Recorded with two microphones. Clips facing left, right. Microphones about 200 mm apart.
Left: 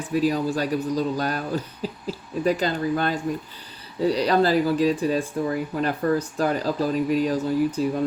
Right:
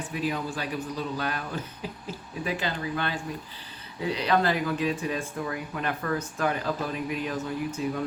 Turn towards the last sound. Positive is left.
turn(degrees=35)  # may be behind; listen again after turning